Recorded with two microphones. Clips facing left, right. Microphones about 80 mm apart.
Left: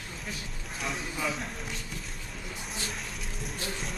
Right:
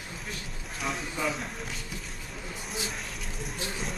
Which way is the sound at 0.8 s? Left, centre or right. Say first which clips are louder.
Right 2 dB; centre.